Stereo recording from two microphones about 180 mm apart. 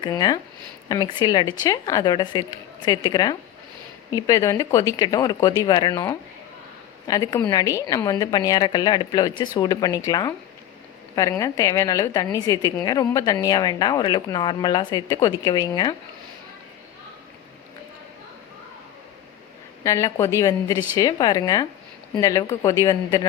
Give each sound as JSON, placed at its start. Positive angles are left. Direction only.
{"t": 0.0, "sound": "a woman's voice", "side_deg": 25}
{"t": 7.1, "sound": "a woman's voice", "side_deg": 20}
{"t": 19.8, "sound": "a woman's voice", "side_deg": 20}